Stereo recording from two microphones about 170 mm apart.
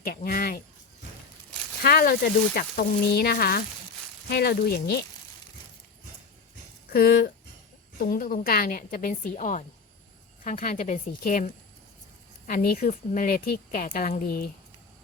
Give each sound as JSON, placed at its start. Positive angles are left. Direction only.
{"t": 0.0, "sound": "speech", "side_deg": 60}
{"t": 1.8, "sound": "speech", "side_deg": 65}
{"t": 6.9, "sound": "a woman's voice", "side_deg": 65}